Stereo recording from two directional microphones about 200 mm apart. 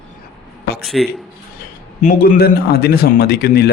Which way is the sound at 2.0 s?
45° left (ahead or behind).